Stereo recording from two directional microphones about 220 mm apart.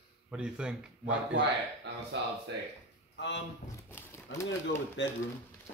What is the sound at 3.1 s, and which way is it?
Speech, 55° left (ahead or behind).